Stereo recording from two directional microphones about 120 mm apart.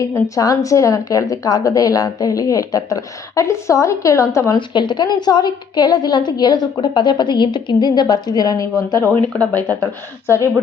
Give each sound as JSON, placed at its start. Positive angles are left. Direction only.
{"t": 0.0, "sound": "speech", "side_deg": 25}
{"t": 4.5, "sound": "a woman's voice", "side_deg": 40}
{"t": 9.4, "sound": "speech", "side_deg": 15}